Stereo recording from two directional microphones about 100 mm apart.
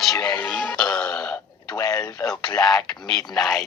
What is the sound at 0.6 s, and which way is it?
Music, 10° left (ahead or behind).